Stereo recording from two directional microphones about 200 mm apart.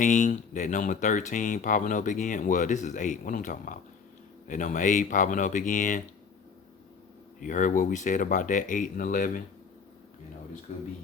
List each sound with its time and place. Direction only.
0.0 s speech: 40° left (ahead or behind)
7.4 s speech: 40° left (ahead or behind)
10.7 s speech: 35° left (ahead or behind)